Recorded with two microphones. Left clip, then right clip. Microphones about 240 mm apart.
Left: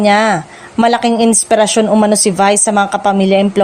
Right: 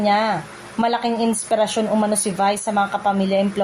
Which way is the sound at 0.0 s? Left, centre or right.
Left.